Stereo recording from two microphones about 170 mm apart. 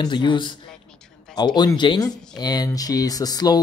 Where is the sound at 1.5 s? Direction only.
25° left (ahead or behind).